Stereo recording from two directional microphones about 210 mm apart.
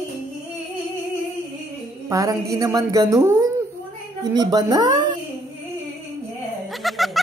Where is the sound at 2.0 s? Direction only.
15° right (ahead or behind).